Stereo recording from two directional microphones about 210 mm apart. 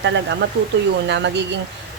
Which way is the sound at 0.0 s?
55° right (ahead or behind).